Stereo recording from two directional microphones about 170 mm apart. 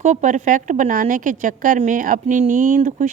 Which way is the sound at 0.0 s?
45° right (ahead or behind).